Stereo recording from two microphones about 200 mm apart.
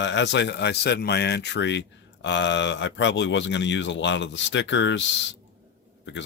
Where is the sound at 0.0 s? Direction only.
65° left (ahead or behind).